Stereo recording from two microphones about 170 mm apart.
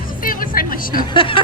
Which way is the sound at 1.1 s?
30° left (ahead or behind).